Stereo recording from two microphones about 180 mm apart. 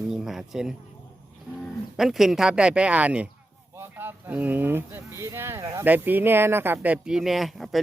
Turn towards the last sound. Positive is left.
turn(degrees=0)  # may be behind; listen again after turning